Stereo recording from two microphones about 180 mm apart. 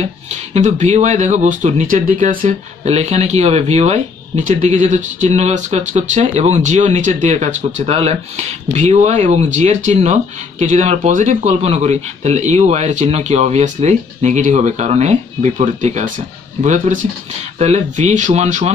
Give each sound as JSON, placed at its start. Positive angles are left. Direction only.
{"t": 0.6, "sound": "speech", "side_deg": -40}